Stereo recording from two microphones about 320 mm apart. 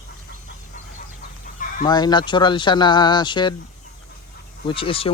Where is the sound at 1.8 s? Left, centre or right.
Centre.